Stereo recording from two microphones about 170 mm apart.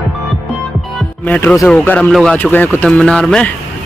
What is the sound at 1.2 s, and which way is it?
Speech, 10° left (ahead or behind).